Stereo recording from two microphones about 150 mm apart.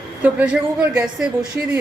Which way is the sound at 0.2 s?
10° right (ahead or behind).